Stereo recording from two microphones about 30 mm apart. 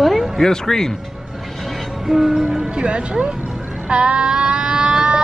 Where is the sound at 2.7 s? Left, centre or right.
Right.